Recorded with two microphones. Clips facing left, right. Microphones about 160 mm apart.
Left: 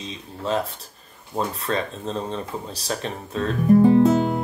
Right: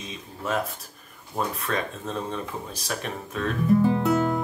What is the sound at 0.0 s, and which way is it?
Speech, 30° left (ahead or behind).